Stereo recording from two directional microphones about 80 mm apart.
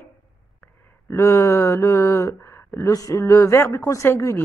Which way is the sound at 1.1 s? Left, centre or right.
Left.